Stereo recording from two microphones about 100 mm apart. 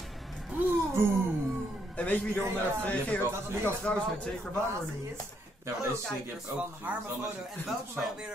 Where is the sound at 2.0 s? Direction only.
15° left (ahead or behind).